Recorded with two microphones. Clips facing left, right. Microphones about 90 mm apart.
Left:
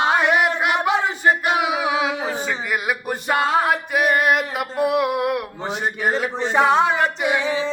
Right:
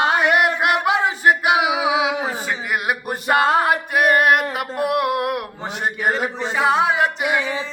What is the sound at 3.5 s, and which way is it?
Music, 5° right (ahead or behind).